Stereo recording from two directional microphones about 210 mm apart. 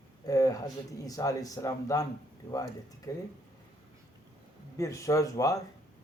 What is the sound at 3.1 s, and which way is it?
Speech, 15° left (ahead or behind).